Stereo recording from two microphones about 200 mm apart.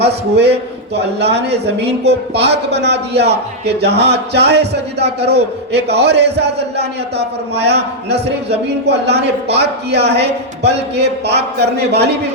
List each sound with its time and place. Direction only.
0.0 s speech: 55° right (ahead or behind)